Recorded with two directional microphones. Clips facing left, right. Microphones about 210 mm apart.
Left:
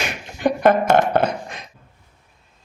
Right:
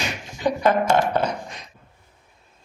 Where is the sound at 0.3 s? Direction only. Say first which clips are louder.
Left 4 dB; 55° left (ahead or behind).